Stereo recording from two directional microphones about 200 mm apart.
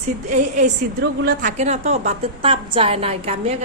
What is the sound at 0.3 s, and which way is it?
A woman's voice, 35° right (ahead or behind).